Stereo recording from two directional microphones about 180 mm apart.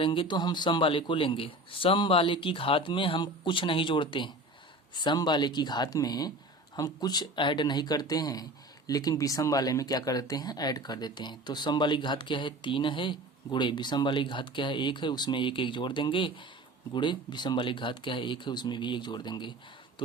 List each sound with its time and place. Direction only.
0.0 s speech: 30° left (ahead or behind)